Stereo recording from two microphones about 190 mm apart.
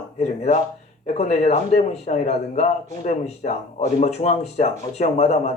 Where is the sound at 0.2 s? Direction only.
35° left (ahead or behind).